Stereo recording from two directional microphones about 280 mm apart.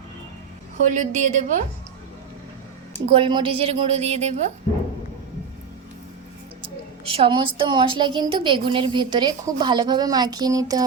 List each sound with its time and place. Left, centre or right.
0.9 s a woman's voice: right
3.1 s a woman's voice: centre
6.6 s a woman's voice: centre